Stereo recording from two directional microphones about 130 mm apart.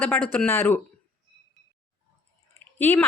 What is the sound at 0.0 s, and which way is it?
Speech, 15° left (ahead or behind).